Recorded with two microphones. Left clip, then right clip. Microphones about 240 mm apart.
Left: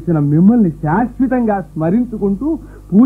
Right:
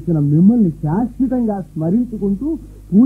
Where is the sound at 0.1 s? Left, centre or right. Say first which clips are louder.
Left 2 dB; left.